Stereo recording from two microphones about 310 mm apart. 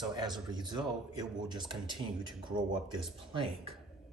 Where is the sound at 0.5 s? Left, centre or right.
Centre.